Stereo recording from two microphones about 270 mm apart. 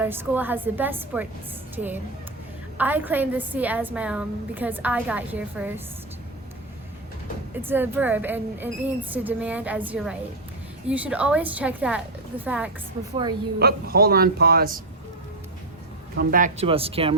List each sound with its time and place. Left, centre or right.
0.0 s a woman's voice: centre
7.5 s a woman's voice: centre
13.6 s speech: right
16.1 s speech: right